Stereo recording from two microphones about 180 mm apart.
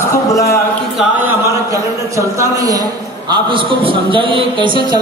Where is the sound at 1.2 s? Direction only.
15° right (ahead or behind).